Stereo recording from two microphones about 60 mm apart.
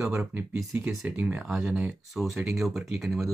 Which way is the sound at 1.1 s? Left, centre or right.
Right.